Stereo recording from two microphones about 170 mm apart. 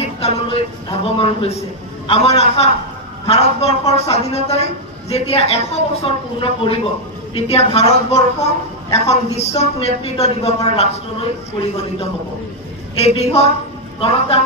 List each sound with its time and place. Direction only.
0.0 s a sound: 35° left (ahead or behind)
2.0 s a man's voice: 35° left (ahead or behind)
13.0 s a man's voice: 35° left (ahead or behind)